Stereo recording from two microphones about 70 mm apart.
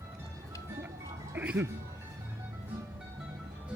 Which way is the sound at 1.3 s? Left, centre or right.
Centre.